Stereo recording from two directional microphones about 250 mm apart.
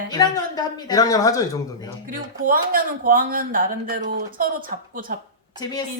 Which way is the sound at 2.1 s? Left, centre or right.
Right.